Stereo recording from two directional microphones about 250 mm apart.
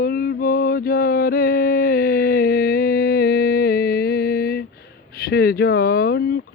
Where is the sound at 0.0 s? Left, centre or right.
Left.